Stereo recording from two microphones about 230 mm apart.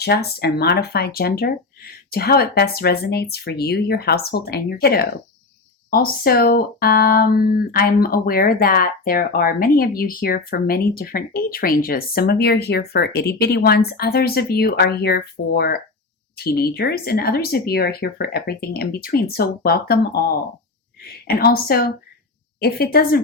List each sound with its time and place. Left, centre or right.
0.0 s speech: left
21.3 s speech: left